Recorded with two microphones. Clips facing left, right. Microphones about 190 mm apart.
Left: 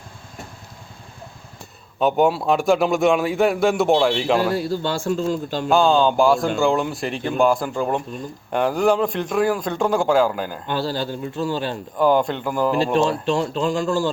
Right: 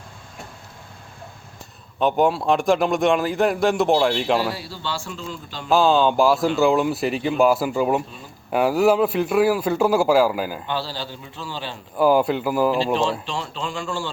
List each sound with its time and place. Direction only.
2.0 s a man's voice: centre (ahead or behind)
4.5 s speech: 50° left (ahead or behind)
5.6 s a man's voice: centre (ahead or behind)
10.7 s speech: 50° left (ahead or behind)
11.9 s a man's voice: 5° right (ahead or behind)
12.8 s speech: 45° left (ahead or behind)